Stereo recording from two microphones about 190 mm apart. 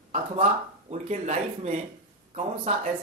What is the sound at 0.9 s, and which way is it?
Speech, 35° right (ahead or behind).